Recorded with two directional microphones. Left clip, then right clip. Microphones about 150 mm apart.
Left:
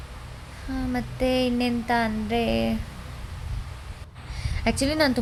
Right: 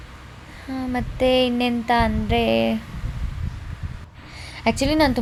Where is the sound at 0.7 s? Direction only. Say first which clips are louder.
Right 3 dB; 25° right (ahead or behind).